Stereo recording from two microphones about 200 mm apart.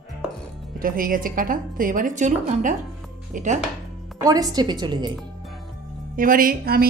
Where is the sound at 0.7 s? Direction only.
45° right (ahead or behind).